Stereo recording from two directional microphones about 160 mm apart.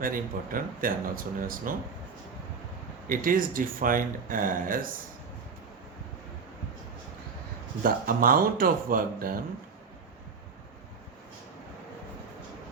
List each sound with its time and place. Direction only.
0.0 s speech: 60° right (ahead or behind)
3.1 s speech: 60° right (ahead or behind)
7.8 s speech: 60° right (ahead or behind)